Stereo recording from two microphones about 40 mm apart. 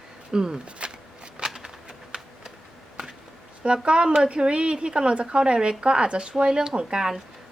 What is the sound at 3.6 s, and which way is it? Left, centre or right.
Speech, right.